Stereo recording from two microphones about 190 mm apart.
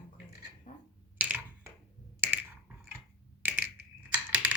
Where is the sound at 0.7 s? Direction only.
40° left (ahead or behind).